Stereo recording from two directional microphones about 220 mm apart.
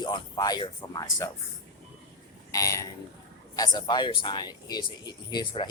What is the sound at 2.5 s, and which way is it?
Speech, 15° left (ahead or behind).